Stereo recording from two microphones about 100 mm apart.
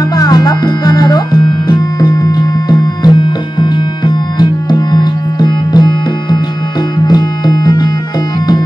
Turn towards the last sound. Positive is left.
turn(degrees=45)  # may be behind; listen again after turning